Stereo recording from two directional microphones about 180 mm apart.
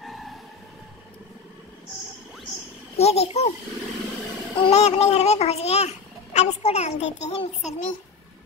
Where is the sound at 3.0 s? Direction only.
35° left (ahead or behind).